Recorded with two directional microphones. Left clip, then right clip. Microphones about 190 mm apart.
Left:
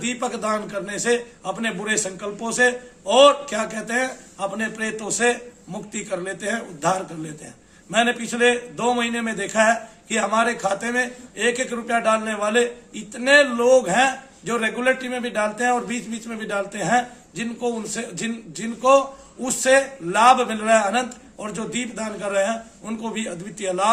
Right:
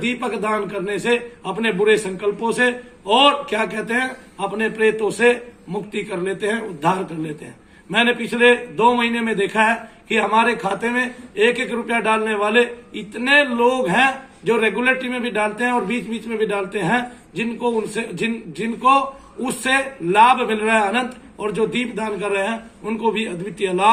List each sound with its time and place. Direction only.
0.0 s a man's voice: 30° left (ahead or behind)
7.9 s a man's voice: 25° left (ahead or behind)